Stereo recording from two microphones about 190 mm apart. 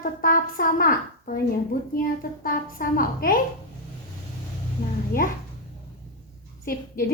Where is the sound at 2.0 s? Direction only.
50° left (ahead or behind).